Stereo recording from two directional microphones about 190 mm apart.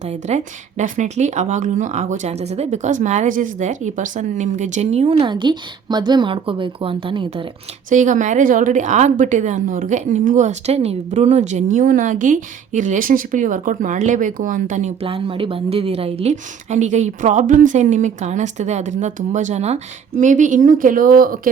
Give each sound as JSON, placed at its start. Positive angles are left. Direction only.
{"t": 0.1, "sound": "a woman's voice", "side_deg": -35}
{"t": 7.9, "sound": "a woman's voice", "side_deg": -40}